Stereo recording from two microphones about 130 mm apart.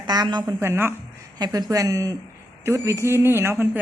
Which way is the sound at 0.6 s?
20° right (ahead or behind).